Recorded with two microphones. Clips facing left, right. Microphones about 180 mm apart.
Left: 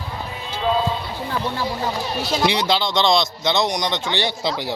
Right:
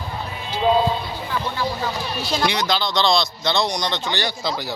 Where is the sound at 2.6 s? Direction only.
25° left (ahead or behind).